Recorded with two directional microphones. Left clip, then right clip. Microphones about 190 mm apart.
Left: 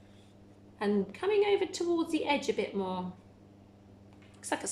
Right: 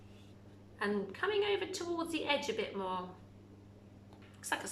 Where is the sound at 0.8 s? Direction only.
25° left (ahead or behind).